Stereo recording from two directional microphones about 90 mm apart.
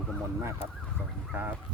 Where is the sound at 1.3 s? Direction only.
20° right (ahead or behind).